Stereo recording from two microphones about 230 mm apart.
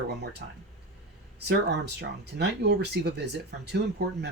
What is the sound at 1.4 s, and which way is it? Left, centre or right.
Speech, right.